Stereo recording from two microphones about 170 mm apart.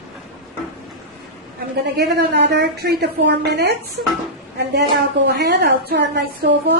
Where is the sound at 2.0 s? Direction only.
80° right.